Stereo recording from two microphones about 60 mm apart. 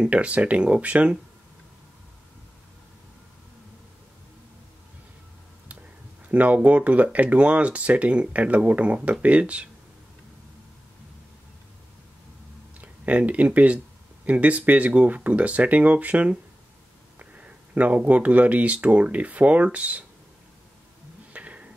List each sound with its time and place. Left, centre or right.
0.0 s speech: right
6.2 s speech: right
12.8 s speech: right
21.3 s a sound: right